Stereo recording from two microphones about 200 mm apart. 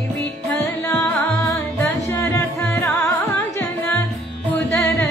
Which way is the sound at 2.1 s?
15° left (ahead or behind).